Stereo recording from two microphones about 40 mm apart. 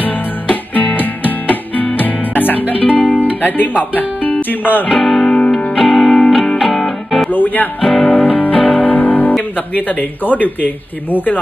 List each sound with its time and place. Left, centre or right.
0.0 s music: left
4.8 s music: centre
5.2 s music: centre
5.8 s music: centre
7.2 s speech: left
8.0 s music: left
9.4 s speech: left